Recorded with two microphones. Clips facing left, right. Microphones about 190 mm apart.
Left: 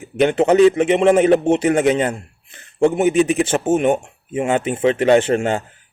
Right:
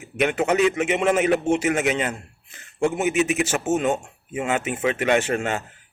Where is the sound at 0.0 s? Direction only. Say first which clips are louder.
Left 7 dB; 30° left (ahead or behind).